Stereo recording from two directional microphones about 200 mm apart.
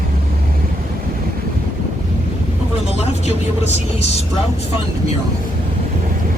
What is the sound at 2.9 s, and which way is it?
Speech, 35° left (ahead or behind).